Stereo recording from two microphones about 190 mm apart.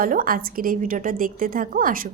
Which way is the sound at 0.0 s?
50° right (ahead or behind).